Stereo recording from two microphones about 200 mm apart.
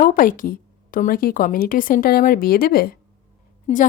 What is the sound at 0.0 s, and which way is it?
A woman's voice, 45° left (ahead or behind).